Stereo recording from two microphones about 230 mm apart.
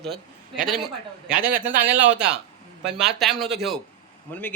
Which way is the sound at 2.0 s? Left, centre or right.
Right.